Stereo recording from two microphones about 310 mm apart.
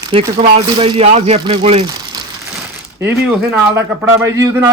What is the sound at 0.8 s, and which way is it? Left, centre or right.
Speech, centre.